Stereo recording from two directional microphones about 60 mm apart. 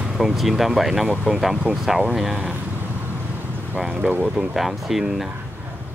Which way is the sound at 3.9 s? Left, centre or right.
Centre.